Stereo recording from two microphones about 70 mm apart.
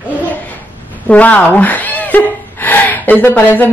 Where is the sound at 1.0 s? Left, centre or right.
Centre.